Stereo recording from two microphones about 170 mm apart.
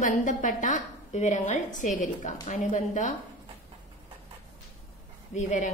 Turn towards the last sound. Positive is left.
turn(degrees=45)  # may be behind; listen again after turning